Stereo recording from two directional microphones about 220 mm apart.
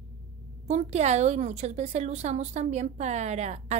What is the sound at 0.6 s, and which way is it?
A woman's voice, 30° right (ahead or behind).